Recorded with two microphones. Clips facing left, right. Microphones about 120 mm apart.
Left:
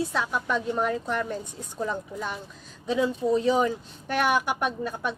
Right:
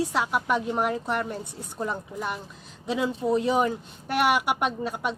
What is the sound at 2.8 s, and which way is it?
A woman's voice, 15° right (ahead or behind).